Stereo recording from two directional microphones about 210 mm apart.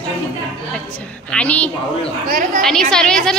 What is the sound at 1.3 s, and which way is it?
Speech, 5° left (ahead or behind).